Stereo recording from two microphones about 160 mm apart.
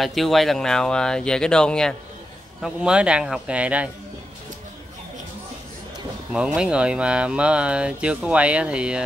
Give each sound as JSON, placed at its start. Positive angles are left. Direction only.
{"t": 0.0, "sound": "speech", "side_deg": 0}
{"t": 2.6, "sound": "speech", "side_deg": -5}
{"t": 6.3, "sound": "speech", "side_deg": -5}